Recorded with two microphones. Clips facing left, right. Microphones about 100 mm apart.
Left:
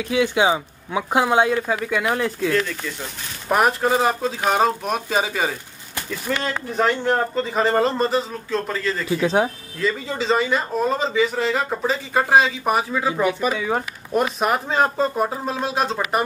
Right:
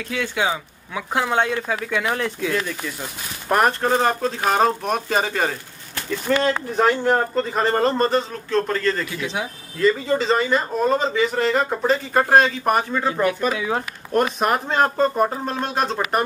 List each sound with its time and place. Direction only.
0.0 s speech: 15° left (ahead or behind)
2.5 s speech: 10° right (ahead or behind)
3.4 s a man's voice: 5° left (ahead or behind)
9.1 s speech: 40° left (ahead or behind)
9.8 s a man's voice: centre (ahead or behind)